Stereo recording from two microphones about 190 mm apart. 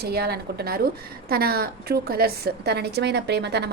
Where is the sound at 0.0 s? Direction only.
55° right (ahead or behind).